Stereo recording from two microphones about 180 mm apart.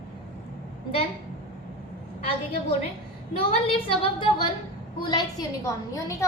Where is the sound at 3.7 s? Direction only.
30° left (ahead or behind).